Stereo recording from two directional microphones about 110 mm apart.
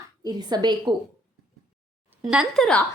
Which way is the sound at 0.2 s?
40° right (ahead or behind).